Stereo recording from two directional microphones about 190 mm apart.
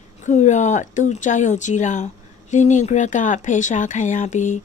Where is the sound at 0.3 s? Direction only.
40° left (ahead or behind).